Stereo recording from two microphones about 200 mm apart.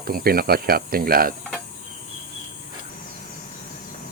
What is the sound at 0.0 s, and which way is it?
Speech, 50° right (ahead or behind).